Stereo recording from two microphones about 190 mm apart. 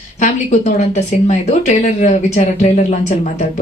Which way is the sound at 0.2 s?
35° left (ahead or behind).